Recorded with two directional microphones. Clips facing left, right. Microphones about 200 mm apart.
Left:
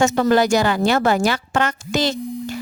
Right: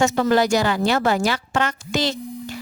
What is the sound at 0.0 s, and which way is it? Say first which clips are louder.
Speech: left 2 dB; 50° left (ahead or behind).